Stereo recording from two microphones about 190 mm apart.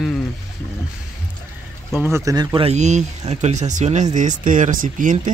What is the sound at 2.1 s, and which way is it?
Speech, 20° right (ahead or behind).